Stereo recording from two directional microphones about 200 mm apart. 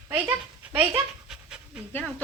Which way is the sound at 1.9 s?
10° left (ahead or behind).